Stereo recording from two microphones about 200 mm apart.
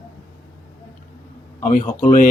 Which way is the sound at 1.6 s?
40° left (ahead or behind).